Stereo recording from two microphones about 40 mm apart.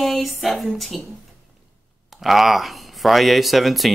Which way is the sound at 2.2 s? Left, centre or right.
Centre.